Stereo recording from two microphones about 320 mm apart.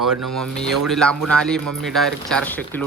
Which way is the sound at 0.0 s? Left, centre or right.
Right.